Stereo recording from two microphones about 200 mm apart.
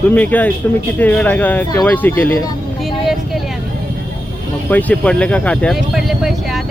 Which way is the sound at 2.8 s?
Centre (ahead or behind).